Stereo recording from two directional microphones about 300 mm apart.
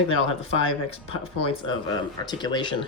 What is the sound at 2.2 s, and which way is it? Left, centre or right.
Speech, centre.